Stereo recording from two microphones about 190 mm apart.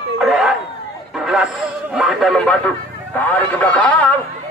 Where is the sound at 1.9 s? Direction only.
5° right (ahead or behind).